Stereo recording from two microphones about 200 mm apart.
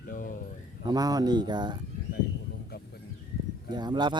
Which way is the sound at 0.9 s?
20° right (ahead or behind).